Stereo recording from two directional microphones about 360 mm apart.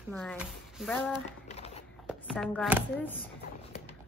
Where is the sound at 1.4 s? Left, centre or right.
Centre.